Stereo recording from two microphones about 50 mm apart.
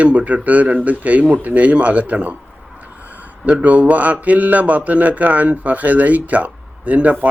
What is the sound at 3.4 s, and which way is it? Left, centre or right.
Speech, right.